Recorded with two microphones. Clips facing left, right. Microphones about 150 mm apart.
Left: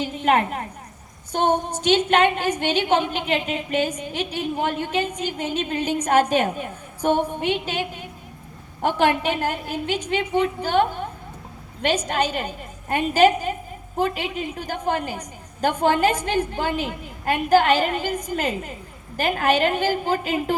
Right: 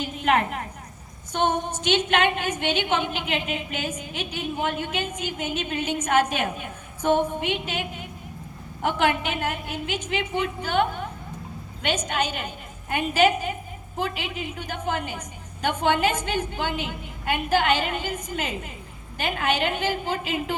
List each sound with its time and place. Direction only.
0.3 s a woman's voice: 35° left (ahead or behind)